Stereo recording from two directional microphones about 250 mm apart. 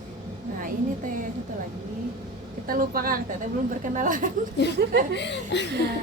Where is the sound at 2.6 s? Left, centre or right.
Right.